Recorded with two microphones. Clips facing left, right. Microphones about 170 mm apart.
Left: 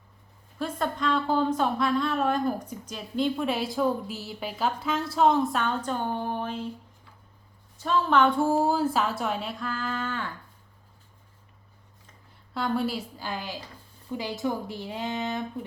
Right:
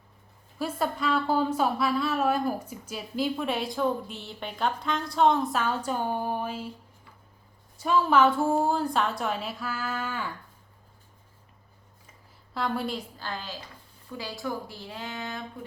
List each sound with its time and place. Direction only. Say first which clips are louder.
0.6 s a woman's voice: even; 5° right (ahead or behind)
7.8 s a woman's voice: right 1 dB; 10° right (ahead or behind)
12.5 s a woman's voice: left 2 dB; centre (ahead or behind); by 15.4 s 20° left (ahead or behind)